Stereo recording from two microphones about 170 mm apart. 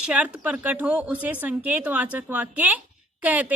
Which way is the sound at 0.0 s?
5° right (ahead or behind).